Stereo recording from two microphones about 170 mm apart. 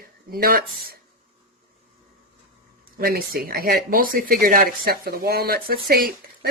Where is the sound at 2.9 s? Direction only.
60° right (ahead or behind).